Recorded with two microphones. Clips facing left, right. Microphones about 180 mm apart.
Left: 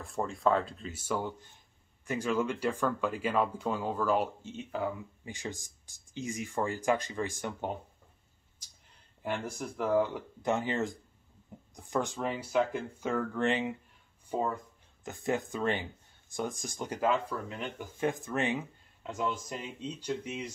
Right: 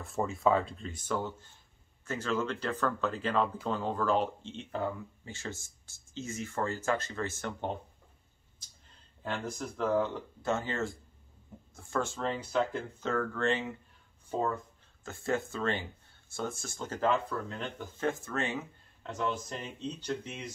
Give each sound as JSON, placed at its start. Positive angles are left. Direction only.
{"t": 0.0, "sound": "speech", "side_deg": 0}
{"t": 9.2, "sound": "speech", "side_deg": 10}